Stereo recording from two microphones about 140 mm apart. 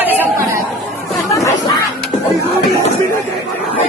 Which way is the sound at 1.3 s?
25° left (ahead or behind).